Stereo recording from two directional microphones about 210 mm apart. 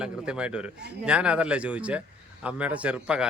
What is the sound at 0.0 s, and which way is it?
A man's voice, 5° right (ahead or behind).